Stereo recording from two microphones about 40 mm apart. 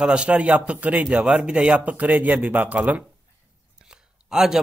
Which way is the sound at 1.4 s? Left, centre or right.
Right.